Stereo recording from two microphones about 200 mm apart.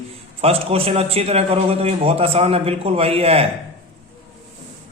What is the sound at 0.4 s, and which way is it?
A man's voice, 30° right (ahead or behind).